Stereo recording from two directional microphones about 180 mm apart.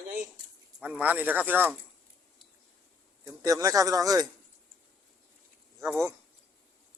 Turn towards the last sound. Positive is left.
turn(degrees=-15)  # may be behind; listen again after turning